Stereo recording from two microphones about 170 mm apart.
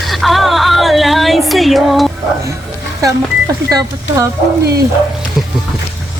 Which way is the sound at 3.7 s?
20° right (ahead or behind).